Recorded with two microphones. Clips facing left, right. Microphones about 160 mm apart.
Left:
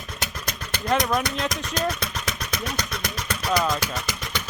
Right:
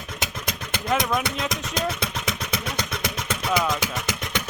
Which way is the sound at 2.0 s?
20° right (ahead or behind).